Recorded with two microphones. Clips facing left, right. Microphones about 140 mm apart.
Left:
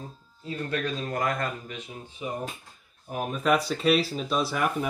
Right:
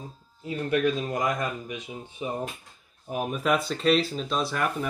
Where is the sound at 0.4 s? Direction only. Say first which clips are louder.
Right 5 dB; 15° right (ahead or behind).